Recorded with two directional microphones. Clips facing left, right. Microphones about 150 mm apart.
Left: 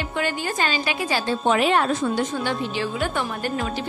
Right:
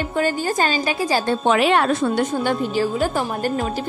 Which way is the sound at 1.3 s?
80° right.